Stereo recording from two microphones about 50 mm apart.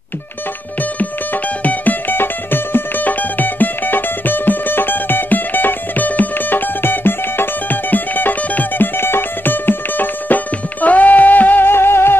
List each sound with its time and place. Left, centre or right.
0.9 s music: left
11.7 s music: left